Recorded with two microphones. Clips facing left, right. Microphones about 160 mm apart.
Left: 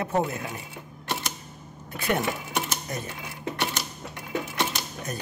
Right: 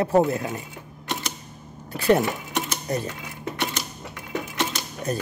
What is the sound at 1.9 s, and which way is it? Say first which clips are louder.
Speech: right 7 dB; 30° right (ahead or behind).